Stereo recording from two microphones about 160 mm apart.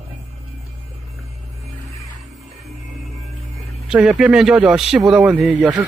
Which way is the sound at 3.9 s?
5° right (ahead or behind).